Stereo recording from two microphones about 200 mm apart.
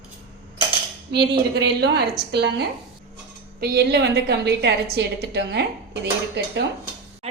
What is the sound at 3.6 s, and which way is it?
A woman's voice, 50° right (ahead or behind).